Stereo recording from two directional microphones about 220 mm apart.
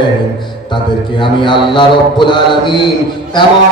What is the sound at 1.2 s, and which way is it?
Mantra, 20° left (ahead or behind).